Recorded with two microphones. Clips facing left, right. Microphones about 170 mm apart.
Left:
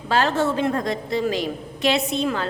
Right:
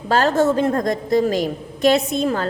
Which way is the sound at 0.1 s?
40° right (ahead or behind).